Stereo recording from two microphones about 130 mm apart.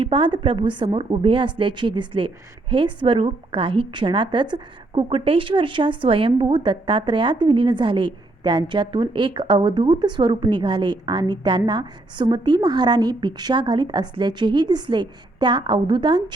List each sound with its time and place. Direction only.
0.0 s a woman's voice: 40° right (ahead or behind)